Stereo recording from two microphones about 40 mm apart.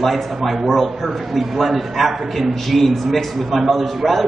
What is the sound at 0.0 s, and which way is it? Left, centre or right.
A man's voice, centre.